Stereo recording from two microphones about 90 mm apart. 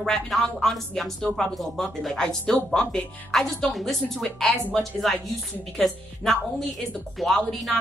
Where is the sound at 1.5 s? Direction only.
Centre (ahead or behind).